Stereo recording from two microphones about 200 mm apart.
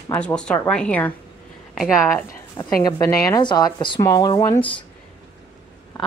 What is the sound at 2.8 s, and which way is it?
Speech, 20° left (ahead or behind).